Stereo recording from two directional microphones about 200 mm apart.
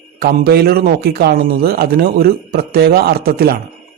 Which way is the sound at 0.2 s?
50° right (ahead or behind).